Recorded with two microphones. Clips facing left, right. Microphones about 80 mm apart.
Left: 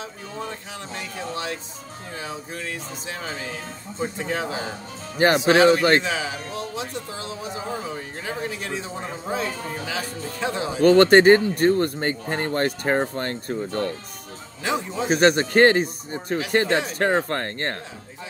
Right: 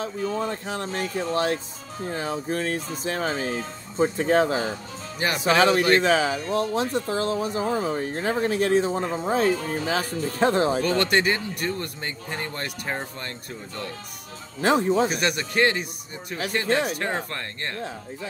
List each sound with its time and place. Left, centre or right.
0.0 s speech: right
5.8 s speech: left
6.0 s speech: right
10.8 s speech: left
14.6 s speech: right
15.0 s speech: left